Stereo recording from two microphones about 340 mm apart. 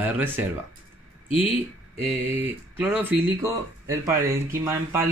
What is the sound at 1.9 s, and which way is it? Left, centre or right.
Speech, centre.